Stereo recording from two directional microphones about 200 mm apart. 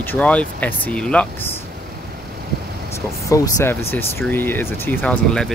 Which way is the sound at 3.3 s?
15° left (ahead or behind).